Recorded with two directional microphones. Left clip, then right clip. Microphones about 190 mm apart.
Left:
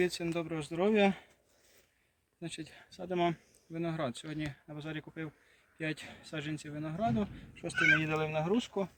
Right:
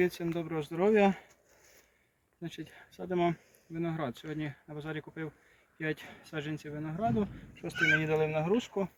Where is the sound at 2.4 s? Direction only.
20° left (ahead or behind).